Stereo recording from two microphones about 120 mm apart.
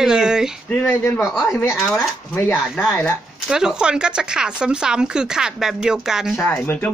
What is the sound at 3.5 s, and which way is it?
Speech, 5° right (ahead or behind).